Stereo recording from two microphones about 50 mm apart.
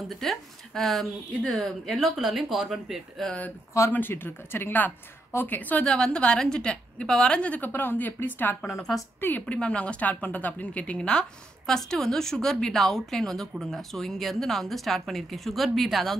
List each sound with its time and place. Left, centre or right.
0.1 s a woman's voice: centre
3.2 s a woman's voice: centre
4.1 s speech: left
5.9 s a woman's voice: centre
7.6 s speech: left
8.6 s a woman's voice: centre
9.5 s a woman's voice: left
11.0 s a woman's voice: centre